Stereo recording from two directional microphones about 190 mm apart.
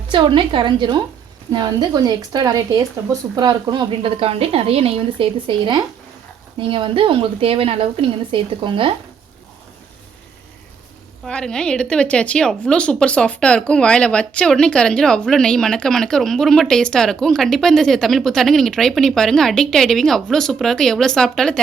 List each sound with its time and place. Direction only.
0.1 s speech: 25° right (ahead or behind)
11.3 s a woman's voice: 5° left (ahead or behind)